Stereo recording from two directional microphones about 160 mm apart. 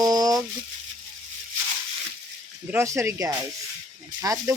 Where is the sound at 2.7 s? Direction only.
15° right (ahead or behind).